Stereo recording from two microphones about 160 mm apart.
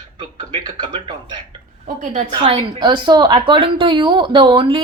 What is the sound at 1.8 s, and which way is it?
Speech, 50° right (ahead or behind).